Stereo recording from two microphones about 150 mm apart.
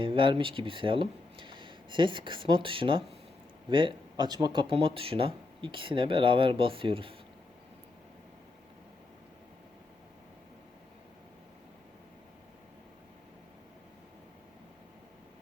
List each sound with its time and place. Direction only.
0.0 s speech: 35° right (ahead or behind)